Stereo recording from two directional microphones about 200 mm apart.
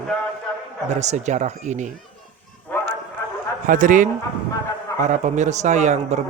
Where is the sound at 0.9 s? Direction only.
35° right (ahead or behind).